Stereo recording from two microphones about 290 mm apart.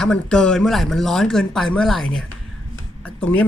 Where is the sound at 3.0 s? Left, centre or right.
Centre.